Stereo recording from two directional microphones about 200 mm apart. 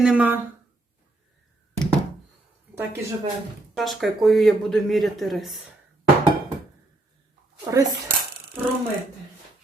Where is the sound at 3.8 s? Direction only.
Centre (ahead or behind).